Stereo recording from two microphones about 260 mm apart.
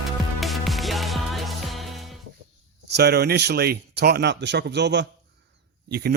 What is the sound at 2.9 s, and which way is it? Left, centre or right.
Speech, right.